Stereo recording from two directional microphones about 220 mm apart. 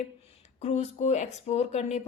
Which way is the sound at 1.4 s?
30° left (ahead or behind).